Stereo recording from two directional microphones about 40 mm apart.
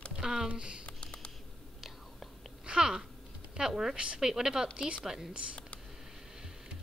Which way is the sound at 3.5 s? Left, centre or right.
Centre.